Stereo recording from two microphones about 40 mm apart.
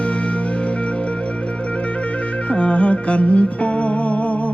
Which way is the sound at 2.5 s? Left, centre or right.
Left.